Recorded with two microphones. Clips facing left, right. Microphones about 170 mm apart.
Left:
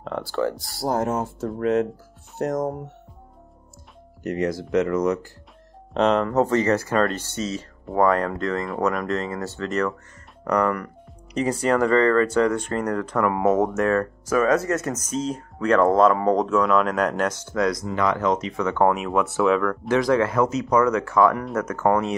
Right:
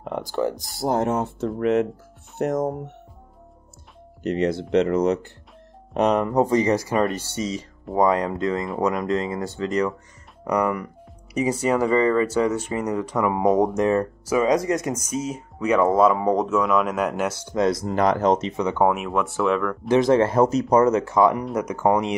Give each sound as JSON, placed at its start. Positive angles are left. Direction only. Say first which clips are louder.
{"t": 0.0, "sound": "speech", "louder": "even", "side_deg": -15}
{"t": 4.2, "sound": "speech", "louder": "right 2 dB", "side_deg": -30}
{"t": 5.9, "sound": "speech", "louder": "even", "side_deg": -15}
{"t": 17.5, "sound": "speech", "louder": "right 5 dB", "side_deg": -25}
{"t": 17.8, "sound": "speech", "louder": "right 3 dB", "side_deg": -40}
{"t": 18.5, "sound": "speech", "louder": "right 1 dB", "side_deg": -20}
{"t": 18.8, "sound": "speech", "louder": "left 2 dB", "side_deg": -5}
{"t": 19.9, "sound": "speech", "louder": "right 3 dB", "side_deg": -25}